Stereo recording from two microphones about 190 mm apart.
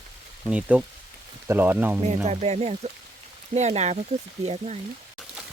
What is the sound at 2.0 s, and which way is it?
Speech, 35° right (ahead or behind).